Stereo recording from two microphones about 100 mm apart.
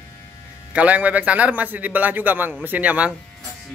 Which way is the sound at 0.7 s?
15° right (ahead or behind).